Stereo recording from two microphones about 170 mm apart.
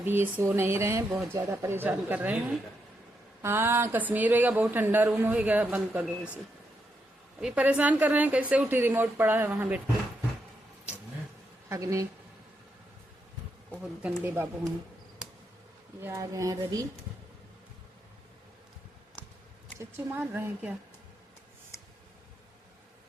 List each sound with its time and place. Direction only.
0.0 s speech: 10° right (ahead or behind)
3.4 s speech: 15° right (ahead or behind)
7.4 s speech: 10° right (ahead or behind)
11.7 s speech: 20° right (ahead or behind)
13.7 s speech: 10° right (ahead or behind)
16.0 s speech: 20° right (ahead or behind)
19.8 s speech: 15° right (ahead or behind)